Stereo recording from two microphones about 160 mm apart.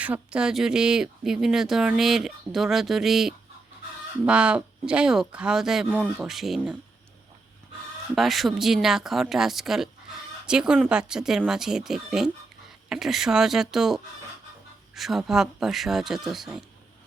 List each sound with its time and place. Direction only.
0.0 s speech: 5° right (ahead or behind)
8.1 s speech: centre (ahead or behind)